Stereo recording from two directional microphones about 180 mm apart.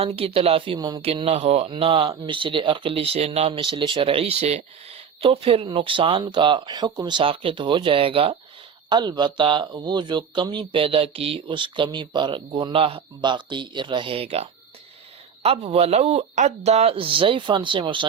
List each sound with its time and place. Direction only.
0.0 s speech: 35° right (ahead or behind)
15.4 s speech: 35° right (ahead or behind)